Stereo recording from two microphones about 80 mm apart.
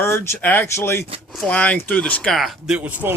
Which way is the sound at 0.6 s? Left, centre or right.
Left.